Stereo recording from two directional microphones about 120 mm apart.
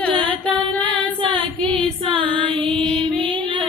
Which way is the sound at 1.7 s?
45° right (ahead or behind).